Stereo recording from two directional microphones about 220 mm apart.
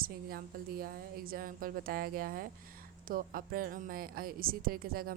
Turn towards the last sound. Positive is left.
turn(degrees=-40)  # may be behind; listen again after turning